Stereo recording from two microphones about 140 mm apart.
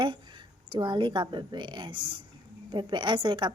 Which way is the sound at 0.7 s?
35° right (ahead or behind).